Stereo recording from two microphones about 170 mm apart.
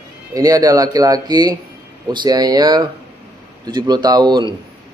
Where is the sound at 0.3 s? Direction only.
20° right (ahead or behind).